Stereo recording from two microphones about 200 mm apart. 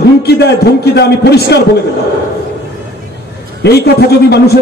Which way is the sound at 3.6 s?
55° left (ahead or behind).